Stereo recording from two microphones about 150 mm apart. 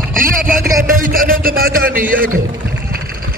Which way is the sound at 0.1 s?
65° right (ahead or behind).